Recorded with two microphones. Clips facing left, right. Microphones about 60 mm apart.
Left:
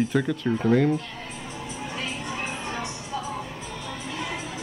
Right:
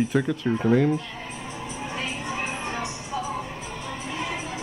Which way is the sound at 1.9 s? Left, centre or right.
Centre.